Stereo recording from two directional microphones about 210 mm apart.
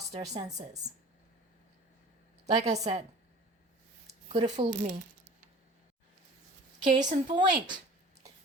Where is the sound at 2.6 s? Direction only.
30° right (ahead or behind).